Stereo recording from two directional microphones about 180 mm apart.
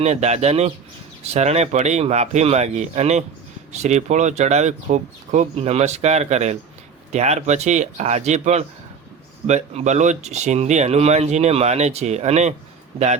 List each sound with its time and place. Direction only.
0.0 s speech: 40° right (ahead or behind)